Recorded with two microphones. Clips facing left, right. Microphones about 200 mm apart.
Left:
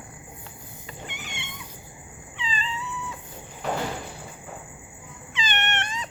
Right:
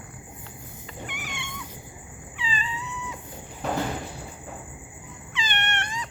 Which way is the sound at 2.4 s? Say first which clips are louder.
Even; 10° right (ahead or behind).